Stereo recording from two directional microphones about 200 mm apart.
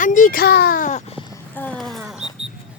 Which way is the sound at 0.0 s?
40° left (ahead or behind).